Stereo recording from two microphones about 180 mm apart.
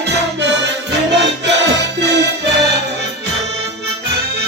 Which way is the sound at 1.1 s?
75° right (ahead or behind).